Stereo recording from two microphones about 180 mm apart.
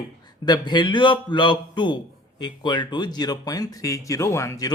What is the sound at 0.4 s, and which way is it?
Speech, 25° left (ahead or behind).